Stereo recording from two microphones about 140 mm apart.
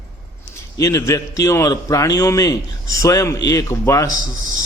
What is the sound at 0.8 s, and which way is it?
A man's voice, 20° left (ahead or behind).